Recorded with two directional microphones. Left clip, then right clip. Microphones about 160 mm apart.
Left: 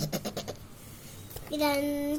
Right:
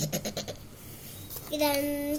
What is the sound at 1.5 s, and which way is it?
Child singing, 75° left (ahead or behind).